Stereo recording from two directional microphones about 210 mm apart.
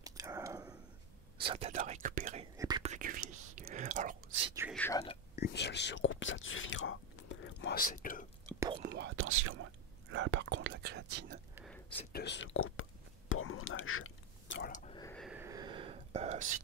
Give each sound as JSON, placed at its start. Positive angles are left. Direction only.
{"t": 0.0, "sound": "a sound", "side_deg": -15}
{"t": 1.4, "sound": "speech", "side_deg": -25}
{"t": 2.5, "sound": "whispering", "side_deg": -15}
{"t": 2.8, "sound": "whispering", "side_deg": -35}
{"t": 4.7, "sound": "speech", "side_deg": 10}
{"t": 5.3, "sound": "whispering", "side_deg": 50}
{"t": 7.7, "sound": "speech", "side_deg": 40}
{"t": 8.5, "sound": "whispering", "side_deg": -20}
{"t": 8.8, "sound": "speech", "side_deg": -50}
{"t": 10.1, "sound": "speech", "side_deg": -60}
{"t": 12.1, "sound": "speech", "side_deg": 55}
{"t": 13.3, "sound": "whispering", "side_deg": 75}
{"t": 15.0, "sound": "a sound", "side_deg": 5}
{"t": 15.3, "sound": "whispering", "side_deg": -15}